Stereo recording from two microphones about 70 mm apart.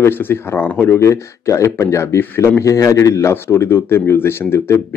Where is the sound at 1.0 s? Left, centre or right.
Left.